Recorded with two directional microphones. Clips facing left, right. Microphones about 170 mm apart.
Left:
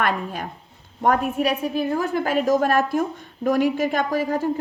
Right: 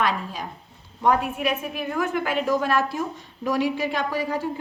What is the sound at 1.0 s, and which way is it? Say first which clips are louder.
A woman's voice: left 2 dB; 40° left (ahead or behind).